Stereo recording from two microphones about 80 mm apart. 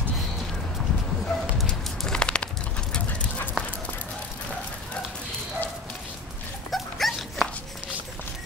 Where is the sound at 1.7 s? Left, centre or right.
Centre.